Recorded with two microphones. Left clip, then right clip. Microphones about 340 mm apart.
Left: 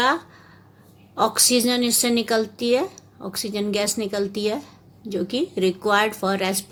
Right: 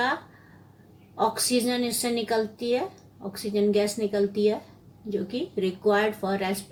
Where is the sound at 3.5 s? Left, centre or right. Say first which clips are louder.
Right 1 dB; left.